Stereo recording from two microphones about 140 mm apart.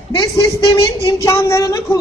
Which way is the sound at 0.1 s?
30° left (ahead or behind).